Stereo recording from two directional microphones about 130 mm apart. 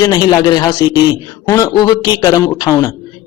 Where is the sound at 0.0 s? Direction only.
30° left (ahead or behind).